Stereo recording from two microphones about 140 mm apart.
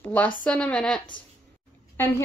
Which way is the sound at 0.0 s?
10° left (ahead or behind).